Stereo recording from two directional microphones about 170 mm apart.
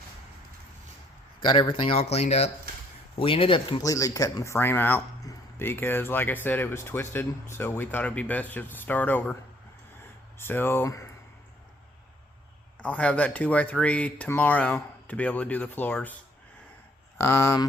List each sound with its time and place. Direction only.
1.4 s a man's voice: 30° left (ahead or behind); by 9.3 s 10° left (ahead or behind)
10.3 s speech: 15° left (ahead or behind)
12.8 s speech: 5° left (ahead or behind)
17.2 s speech: 15° left (ahead or behind)